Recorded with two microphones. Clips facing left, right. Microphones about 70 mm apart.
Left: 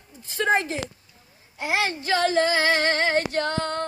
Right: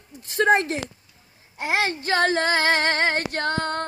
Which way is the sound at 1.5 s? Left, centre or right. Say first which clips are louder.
Right 1 dB; right.